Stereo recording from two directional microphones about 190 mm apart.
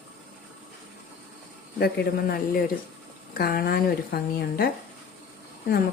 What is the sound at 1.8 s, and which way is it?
A woman's voice, 55° left (ahead or behind).